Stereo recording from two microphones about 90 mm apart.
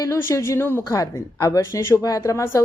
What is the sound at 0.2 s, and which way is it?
Speech, 30° left (ahead or behind).